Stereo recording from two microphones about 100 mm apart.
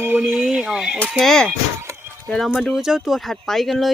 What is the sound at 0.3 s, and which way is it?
Speech, 5° right (ahead or behind).